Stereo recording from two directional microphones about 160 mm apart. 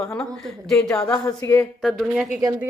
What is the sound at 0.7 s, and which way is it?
Speech, 5° left (ahead or behind).